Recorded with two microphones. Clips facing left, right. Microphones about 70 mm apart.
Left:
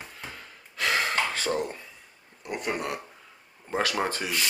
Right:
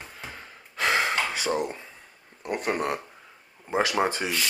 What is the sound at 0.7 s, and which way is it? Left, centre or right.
Gasp, right.